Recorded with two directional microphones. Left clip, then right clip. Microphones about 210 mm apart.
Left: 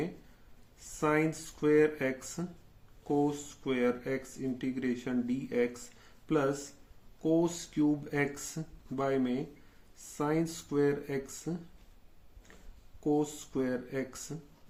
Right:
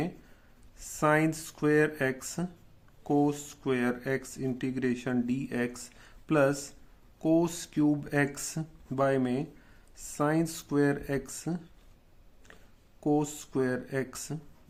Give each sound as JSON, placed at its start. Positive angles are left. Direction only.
{"t": 0.9, "sound": "speech", "side_deg": -40}
{"t": 13.0, "sound": "speech", "side_deg": -40}